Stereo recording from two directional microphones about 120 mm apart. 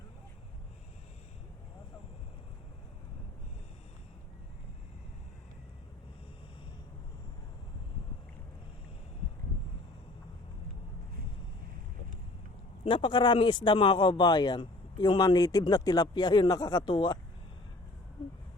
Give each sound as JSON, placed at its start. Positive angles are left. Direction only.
{"t": 12.8, "sound": "a man's voice", "side_deg": 45}